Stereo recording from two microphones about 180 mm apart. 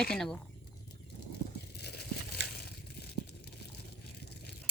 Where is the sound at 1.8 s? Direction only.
65° left (ahead or behind).